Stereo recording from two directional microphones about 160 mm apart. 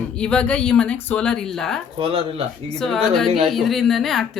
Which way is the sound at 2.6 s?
5° left (ahead or behind).